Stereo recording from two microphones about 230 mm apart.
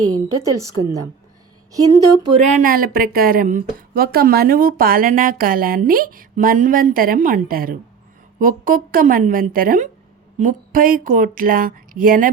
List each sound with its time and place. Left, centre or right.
0.0 s a woman's voice: right
1.8 s speech: right
2.3 s speech: right